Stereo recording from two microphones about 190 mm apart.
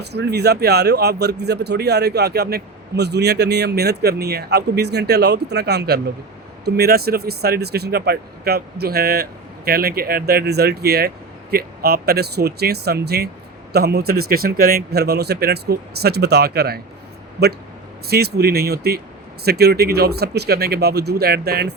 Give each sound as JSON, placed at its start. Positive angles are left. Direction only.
{"t": 0.0, "sound": "speech", "side_deg": -60}
{"t": 18.1, "sound": "speech", "side_deg": -55}